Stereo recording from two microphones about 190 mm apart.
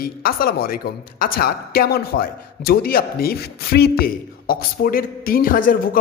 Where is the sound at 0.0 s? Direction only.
50° left (ahead or behind).